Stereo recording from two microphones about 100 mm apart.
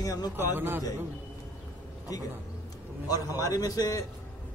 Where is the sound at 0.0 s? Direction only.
40° left (ahead or behind).